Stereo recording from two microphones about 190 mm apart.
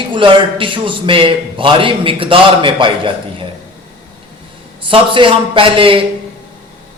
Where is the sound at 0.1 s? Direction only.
25° right (ahead or behind).